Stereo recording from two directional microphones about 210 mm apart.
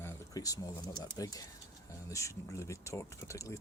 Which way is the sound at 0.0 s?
15° left (ahead or behind).